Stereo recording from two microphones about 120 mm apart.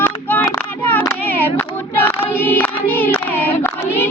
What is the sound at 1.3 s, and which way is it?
Choir, 15° left (ahead or behind).